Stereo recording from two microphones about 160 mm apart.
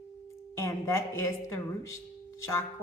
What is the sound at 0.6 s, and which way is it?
A woman's voice, 15° left (ahead or behind).